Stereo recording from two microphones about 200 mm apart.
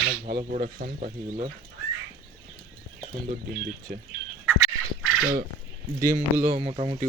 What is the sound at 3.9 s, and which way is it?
Speech, 55° right (ahead or behind).